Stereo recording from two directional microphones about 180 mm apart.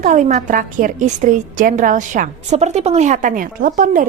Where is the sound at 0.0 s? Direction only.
45° right (ahead or behind).